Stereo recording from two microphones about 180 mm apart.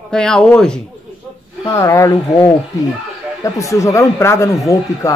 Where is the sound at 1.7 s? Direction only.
15° left (ahead or behind).